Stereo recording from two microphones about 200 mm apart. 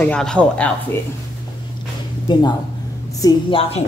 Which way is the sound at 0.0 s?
5° left (ahead or behind).